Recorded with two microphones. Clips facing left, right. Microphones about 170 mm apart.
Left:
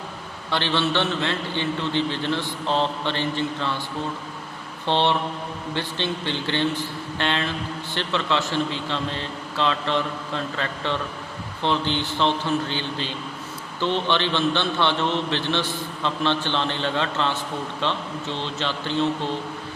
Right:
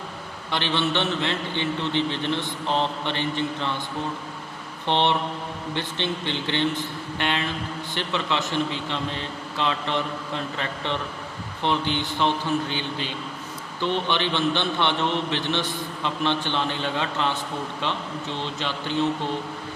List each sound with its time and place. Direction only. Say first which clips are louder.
0.5 s a man's voice: left 2 dB; 15° right (ahead or behind)
4.9 s a man's voice: left 1 dB; 15° right (ahead or behind)
18.3 s a man's voice: left 2 dB; 15° right (ahead or behind)